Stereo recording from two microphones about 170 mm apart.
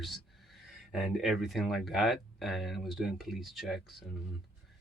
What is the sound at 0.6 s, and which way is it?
Speech, centre (ahead or behind).